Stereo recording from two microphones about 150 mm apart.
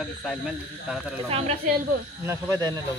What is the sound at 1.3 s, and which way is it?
Speech, 45° right (ahead or behind).